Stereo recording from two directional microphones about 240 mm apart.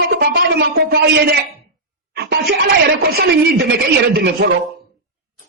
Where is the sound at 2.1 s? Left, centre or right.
Right.